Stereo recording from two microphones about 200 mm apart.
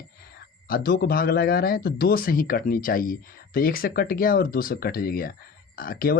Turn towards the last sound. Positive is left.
turn(degrees=45)  # may be behind; listen again after turning